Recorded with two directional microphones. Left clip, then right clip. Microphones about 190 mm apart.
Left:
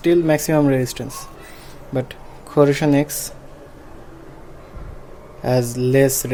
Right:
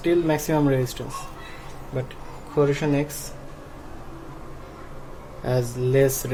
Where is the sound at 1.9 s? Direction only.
50° left (ahead or behind).